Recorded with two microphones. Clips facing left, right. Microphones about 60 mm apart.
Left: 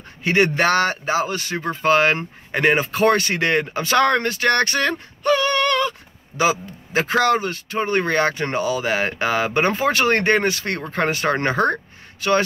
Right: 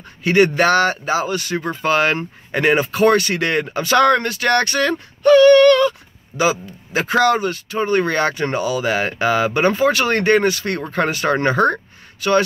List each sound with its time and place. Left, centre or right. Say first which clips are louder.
0.2 s speech: right 3 dB; left
5.2 s speech: right 10 dB; centre